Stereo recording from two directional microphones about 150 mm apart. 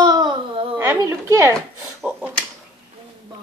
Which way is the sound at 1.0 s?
20° right (ahead or behind).